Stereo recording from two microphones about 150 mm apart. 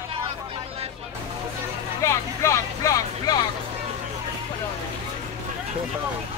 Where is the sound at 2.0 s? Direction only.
20° left (ahead or behind).